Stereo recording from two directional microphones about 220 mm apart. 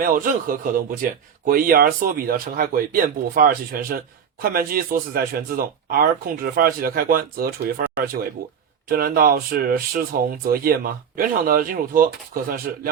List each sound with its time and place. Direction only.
0.0 s speech: 40° right (ahead or behind)
8.9 s speech: 40° right (ahead or behind)